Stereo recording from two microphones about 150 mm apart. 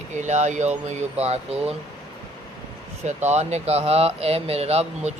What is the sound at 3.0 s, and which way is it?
Speech, 50° right (ahead or behind).